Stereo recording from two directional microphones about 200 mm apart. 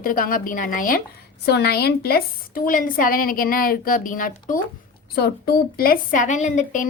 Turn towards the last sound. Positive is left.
turn(degrees=40)  # may be behind; listen again after turning